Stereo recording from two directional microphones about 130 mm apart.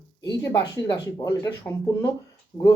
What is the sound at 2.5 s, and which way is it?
Speech, 30° left (ahead or behind).